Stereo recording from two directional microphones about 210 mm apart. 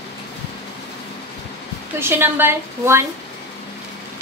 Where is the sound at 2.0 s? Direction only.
10° right (ahead or behind).